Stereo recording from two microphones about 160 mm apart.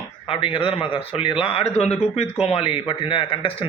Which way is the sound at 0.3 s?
35° left (ahead or behind).